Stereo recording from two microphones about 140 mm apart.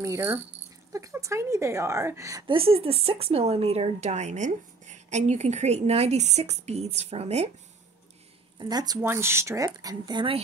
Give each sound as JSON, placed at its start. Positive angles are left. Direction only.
{"t": 0.0, "sound": "a woman's voice", "side_deg": -20}
{"t": 2.4, "sound": "speech", "side_deg": -40}
{"t": 8.5, "sound": "a woman's voice", "side_deg": -30}